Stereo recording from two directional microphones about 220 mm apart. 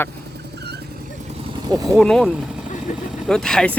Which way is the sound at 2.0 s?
Centre (ahead or behind).